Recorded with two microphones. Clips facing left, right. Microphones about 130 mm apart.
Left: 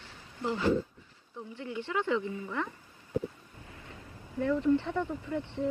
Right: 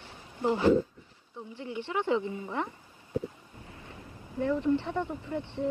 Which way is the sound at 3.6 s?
25° right (ahead or behind).